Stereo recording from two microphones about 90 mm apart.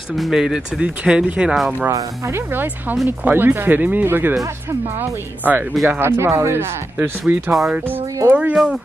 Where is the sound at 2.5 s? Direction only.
20° right (ahead or behind).